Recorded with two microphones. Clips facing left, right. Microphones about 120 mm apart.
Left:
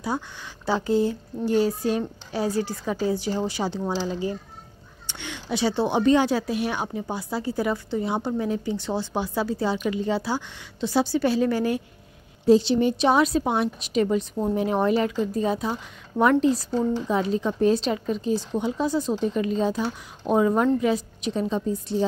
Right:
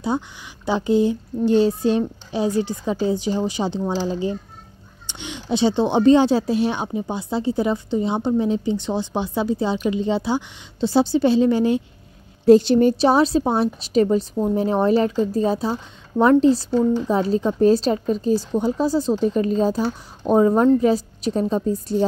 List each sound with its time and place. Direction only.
0.7 s speech: 20° right (ahead or behind)
12.4 s a woman's voice: 55° right (ahead or behind)
12.9 s speech: 35° right (ahead or behind)